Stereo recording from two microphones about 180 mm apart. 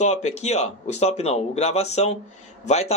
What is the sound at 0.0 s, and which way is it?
A man's voice, 40° left (ahead or behind).